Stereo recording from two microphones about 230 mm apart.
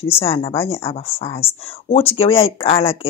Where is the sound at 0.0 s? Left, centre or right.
Left.